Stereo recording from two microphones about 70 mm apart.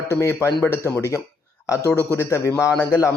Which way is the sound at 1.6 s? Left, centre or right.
Left.